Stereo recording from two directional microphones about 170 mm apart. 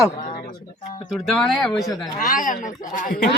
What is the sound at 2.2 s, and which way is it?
Speech, 50° left (ahead or behind).